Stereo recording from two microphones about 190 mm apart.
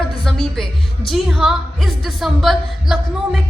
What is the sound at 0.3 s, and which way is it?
A woman's voice, centre (ahead or behind).